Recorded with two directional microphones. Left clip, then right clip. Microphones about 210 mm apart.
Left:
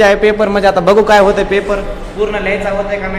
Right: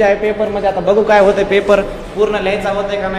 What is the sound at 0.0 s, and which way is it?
Speech, 20° left (ahead or behind).